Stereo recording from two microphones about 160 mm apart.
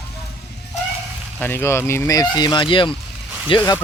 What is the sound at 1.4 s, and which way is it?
Speech, 10° left (ahead or behind).